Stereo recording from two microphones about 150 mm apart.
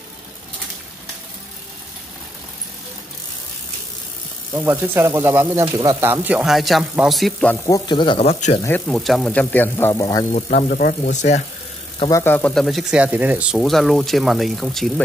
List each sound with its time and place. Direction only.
4.6 s speech: 15° right (ahead or behind); by 7.5 s 5° left (ahead or behind)
7.6 s speech: 25° left (ahead or behind); by 8.5 s 45° left (ahead or behind)
8.6 s speech: 10° left (ahead or behind)
8.9 s speech: centre (ahead or behind)
10.3 s speech: 65° left (ahead or behind)
12.1 s speech: 15° left (ahead or behind)
12.6 s speech: 5° right (ahead or behind)